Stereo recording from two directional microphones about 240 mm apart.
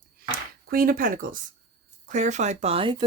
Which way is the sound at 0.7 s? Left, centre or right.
Right.